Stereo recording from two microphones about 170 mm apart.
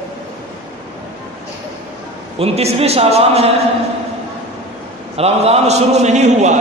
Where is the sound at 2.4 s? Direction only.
35° right (ahead or behind).